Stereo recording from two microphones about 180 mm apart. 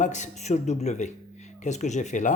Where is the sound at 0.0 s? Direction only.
40° left (ahead or behind).